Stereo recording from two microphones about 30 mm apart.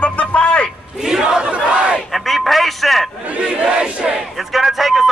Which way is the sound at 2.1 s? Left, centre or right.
Centre.